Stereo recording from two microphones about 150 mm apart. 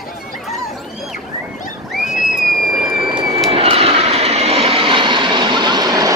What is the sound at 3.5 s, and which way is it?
Vehicle, 40° right (ahead or behind).